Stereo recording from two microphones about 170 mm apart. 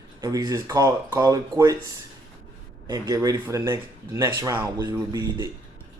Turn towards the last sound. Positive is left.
turn(degrees=-25)  # may be behind; listen again after turning